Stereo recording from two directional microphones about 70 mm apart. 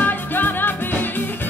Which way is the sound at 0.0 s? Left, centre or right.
Left.